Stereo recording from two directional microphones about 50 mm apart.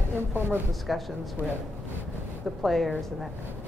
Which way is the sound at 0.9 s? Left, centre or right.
Centre.